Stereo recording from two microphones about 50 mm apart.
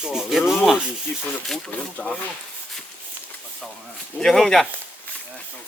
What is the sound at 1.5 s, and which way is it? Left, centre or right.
Speech, centre.